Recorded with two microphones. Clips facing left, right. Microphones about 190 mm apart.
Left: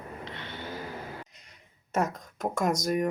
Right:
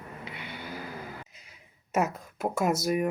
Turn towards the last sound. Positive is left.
turn(degrees=-5)  # may be behind; listen again after turning